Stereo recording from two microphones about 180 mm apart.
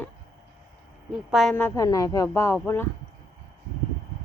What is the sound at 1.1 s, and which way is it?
Speech, centre (ahead or behind).